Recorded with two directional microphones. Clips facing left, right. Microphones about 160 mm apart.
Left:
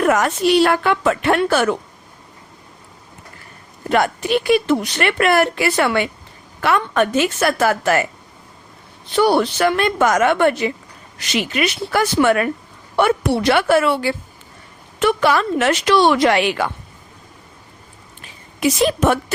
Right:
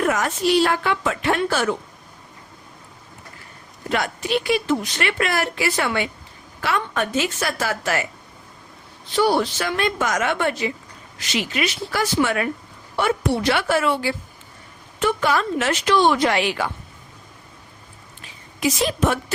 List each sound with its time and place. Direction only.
0.0 s speech: 65° left (ahead or behind)
3.8 s speech: 55° left (ahead or behind)
9.1 s speech: 65° left (ahead or behind)
14.9 s speech: 80° left; by 16.6 s 65° left (ahead or behind)
18.6 s speech: 60° left (ahead or behind)